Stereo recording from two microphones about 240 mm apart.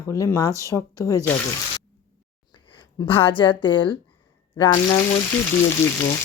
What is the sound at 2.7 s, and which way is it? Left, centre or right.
Speech, left.